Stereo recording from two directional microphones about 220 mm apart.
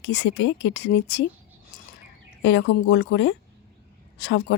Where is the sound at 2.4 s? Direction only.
55° left (ahead or behind).